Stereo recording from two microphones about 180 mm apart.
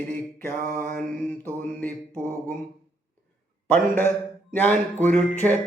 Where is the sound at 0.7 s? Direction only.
50° right (ahead or behind).